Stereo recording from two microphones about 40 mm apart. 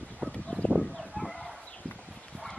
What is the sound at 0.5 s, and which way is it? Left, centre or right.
Chicken, right.